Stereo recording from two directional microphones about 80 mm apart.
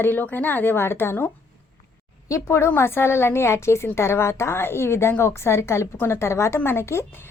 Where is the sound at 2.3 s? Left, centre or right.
Left.